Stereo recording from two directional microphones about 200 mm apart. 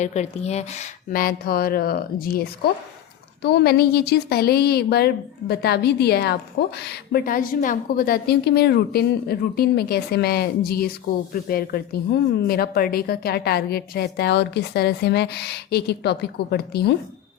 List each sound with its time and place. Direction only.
0.0 s a woman's voice: 35° left (ahead or behind); by 16.9 s 55° left (ahead or behind)